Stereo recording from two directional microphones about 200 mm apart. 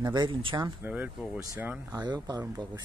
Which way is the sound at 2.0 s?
20° right (ahead or behind).